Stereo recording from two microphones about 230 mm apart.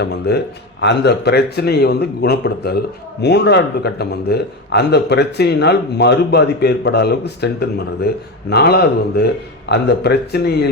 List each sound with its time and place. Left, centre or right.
0.0 s speech: left